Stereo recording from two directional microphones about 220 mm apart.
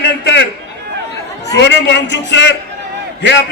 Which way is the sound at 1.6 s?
50° left (ahead or behind).